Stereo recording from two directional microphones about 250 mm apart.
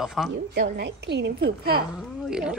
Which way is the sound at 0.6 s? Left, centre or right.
Right.